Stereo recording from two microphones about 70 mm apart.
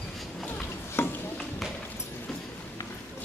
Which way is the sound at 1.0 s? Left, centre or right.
Left.